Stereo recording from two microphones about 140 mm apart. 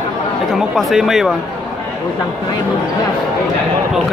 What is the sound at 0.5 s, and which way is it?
Speech, centre (ahead or behind).